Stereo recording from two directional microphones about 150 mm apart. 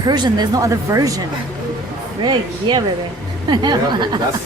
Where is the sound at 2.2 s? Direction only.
30° right (ahead or behind).